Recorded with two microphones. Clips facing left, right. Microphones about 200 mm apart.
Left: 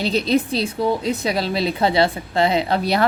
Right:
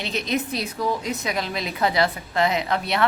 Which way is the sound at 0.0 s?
35° left (ahead or behind).